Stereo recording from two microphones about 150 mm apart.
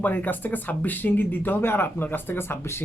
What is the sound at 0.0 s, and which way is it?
Speech, 10° left (ahead or behind).